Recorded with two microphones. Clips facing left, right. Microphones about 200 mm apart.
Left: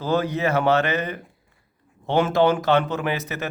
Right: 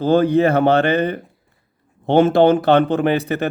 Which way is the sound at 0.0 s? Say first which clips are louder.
Right 8 dB; 30° right (ahead or behind).